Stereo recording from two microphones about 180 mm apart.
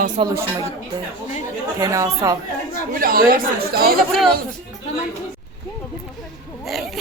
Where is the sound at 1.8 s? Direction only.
20° right (ahead or behind).